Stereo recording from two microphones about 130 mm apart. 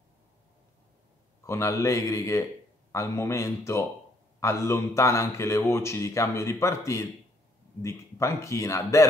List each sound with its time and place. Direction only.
1.4 s speech: 20° left (ahead or behind)